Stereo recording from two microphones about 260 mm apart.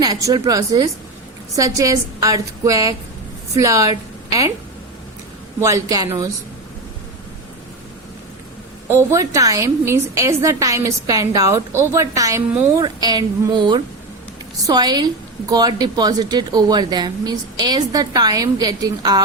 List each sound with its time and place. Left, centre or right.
0.0 s a woman's voice: centre
5.5 s a woman's voice: centre
8.9 s a woman's voice: centre